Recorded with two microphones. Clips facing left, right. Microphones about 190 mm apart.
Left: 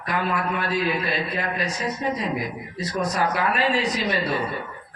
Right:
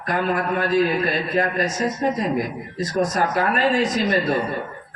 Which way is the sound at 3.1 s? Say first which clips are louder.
Right 2 dB; 45° right (ahead or behind).